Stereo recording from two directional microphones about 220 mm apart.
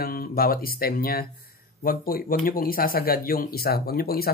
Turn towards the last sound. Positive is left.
turn(degrees=45)  # may be behind; listen again after turning